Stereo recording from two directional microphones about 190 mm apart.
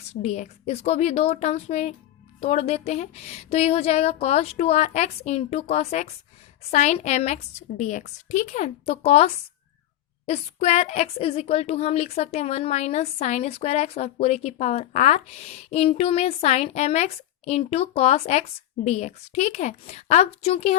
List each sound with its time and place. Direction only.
0.2 s a woman's voice: 35° left (ahead or behind)